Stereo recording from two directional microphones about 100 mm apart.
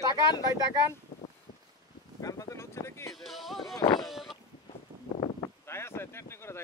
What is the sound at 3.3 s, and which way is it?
Speech, centre (ahead or behind).